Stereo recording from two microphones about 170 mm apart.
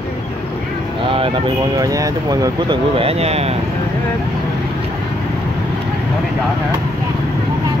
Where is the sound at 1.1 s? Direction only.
30° right (ahead or behind).